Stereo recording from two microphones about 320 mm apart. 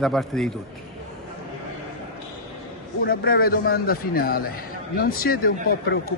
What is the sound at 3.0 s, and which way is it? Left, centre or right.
A man's voice, left.